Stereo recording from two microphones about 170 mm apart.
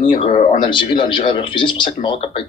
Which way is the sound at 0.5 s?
30° left (ahead or behind).